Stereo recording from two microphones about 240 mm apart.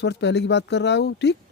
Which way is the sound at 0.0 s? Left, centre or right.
Left.